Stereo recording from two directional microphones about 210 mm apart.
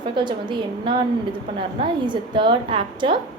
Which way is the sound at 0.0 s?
20° right (ahead or behind).